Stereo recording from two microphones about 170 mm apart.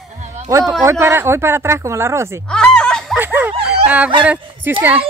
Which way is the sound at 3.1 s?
10° right (ahead or behind).